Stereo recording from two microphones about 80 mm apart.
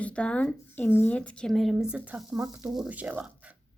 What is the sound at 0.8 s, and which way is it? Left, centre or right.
Speech, left.